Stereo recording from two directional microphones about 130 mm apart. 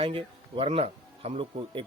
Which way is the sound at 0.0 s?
45° right (ahead or behind).